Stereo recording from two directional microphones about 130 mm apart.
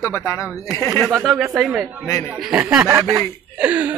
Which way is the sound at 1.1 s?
Centre (ahead or behind).